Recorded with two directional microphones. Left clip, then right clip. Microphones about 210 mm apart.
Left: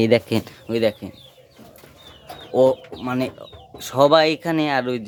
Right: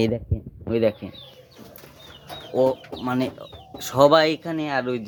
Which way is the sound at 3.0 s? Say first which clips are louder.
Left 1 dB; 5° left (ahead or behind).